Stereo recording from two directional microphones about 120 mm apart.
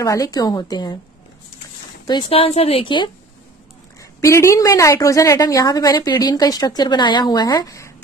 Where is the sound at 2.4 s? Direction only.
60° left (ahead or behind); by 3.1 s 45° left (ahead or behind).